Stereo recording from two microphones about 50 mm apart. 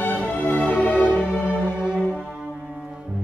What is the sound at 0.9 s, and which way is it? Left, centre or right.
Music, right.